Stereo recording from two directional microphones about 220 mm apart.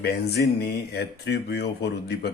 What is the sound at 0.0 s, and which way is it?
Speech, 45° left (ahead or behind).